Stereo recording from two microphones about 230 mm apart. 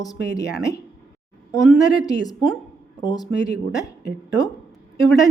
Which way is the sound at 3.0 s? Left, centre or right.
Centre.